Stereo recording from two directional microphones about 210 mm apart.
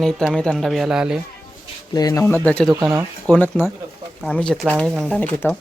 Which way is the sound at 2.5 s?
5° left (ahead or behind).